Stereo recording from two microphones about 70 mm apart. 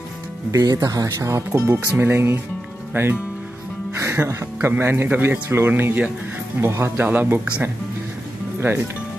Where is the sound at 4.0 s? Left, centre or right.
Right.